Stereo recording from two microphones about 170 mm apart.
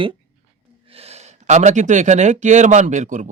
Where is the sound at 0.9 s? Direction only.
35° right (ahead or behind).